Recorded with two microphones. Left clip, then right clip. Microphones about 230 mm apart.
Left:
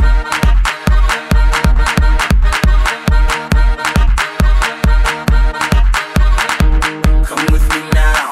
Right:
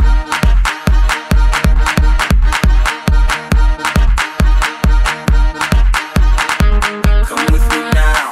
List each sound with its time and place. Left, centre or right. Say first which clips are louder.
0.3 s music: even; right